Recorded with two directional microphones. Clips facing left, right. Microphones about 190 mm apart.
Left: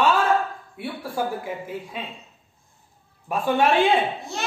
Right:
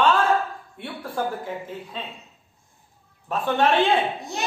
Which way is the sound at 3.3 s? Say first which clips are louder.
Left 1 dB; 10° left (ahead or behind).